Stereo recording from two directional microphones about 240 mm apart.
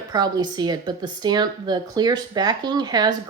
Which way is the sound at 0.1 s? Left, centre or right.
Centre.